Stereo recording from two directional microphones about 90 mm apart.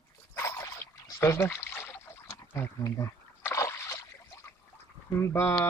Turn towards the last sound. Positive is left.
turn(degrees=30)  # may be behind; listen again after turning